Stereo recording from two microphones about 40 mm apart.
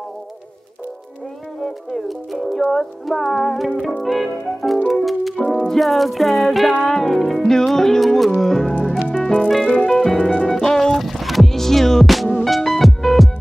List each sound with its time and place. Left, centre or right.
1.6 s speech: centre
2.7 s music: centre
7.4 s music: centre
12.1 s music: centre